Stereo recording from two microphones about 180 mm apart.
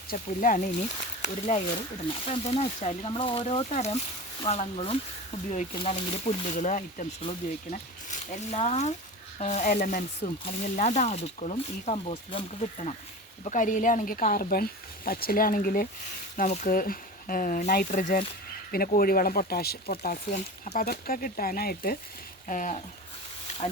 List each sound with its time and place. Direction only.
0.1 s speech: 50° left (ahead or behind); by 12.9 s 30° left (ahead or behind)
13.4 s speech: 45° left (ahead or behind)
20.3 s speech: 40° left (ahead or behind)
20.8 s speech: 55° left (ahead or behind)
22.4 s speech: 45° left (ahead or behind)